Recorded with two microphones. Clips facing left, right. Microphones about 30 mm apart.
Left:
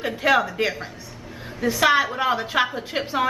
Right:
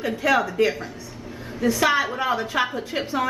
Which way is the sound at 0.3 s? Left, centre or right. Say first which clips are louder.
Left 2 dB; centre.